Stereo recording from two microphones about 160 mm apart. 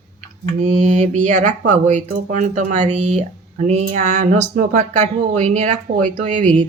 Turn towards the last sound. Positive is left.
turn(degrees=-50)  # may be behind; listen again after turning